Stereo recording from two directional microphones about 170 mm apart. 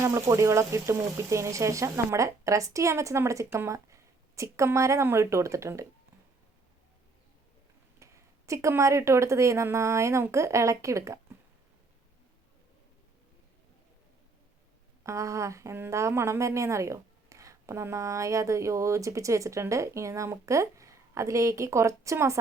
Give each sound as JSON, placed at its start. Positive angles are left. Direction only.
{"t": 0.0, "sound": "a woman's voice", "side_deg": -15}
{"t": 7.9, "sound": "a woman's voice", "side_deg": -15}
{"t": 15.0, "sound": "a woman's voice", "side_deg": -15}